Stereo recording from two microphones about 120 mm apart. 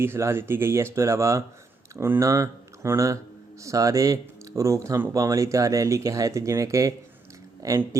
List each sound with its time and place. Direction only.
0.0 s speech: 20° right (ahead or behind)